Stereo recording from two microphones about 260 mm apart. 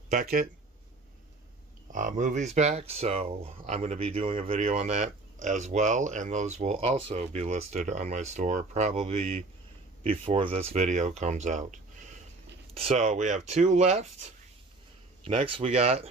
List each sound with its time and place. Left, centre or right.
0.1 s speech: right
1.9 s speech: right
15.2 s speech: centre